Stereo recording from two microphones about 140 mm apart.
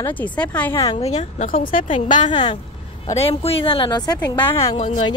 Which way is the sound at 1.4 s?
75° left (ahead or behind).